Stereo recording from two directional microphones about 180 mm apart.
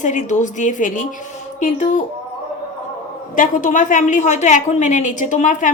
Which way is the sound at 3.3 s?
45° left (ahead or behind).